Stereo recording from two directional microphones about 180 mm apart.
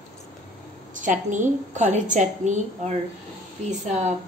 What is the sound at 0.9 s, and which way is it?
A woman's voice, 45° right (ahead or behind).